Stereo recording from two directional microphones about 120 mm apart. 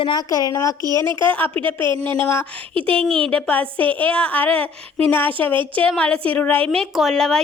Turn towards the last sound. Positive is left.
turn(degrees=5)  # may be behind; listen again after turning